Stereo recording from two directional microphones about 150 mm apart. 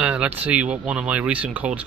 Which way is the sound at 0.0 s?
10° right (ahead or behind).